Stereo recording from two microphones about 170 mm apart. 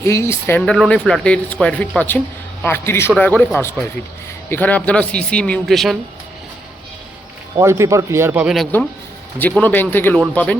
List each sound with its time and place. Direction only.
0.0 s speech: 15° left (ahead or behind)
0.6 s speech: 5° left (ahead or behind)
7.5 s a man's voice: 15° right (ahead or behind)
9.4 s speech: 10° left (ahead or behind)